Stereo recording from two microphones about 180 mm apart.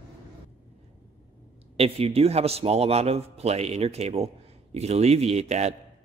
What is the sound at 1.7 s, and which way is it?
A man's voice, 35° right (ahead or behind).